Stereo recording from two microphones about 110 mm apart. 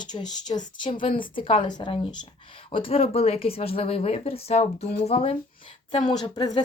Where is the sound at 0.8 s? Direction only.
50° left (ahead or behind).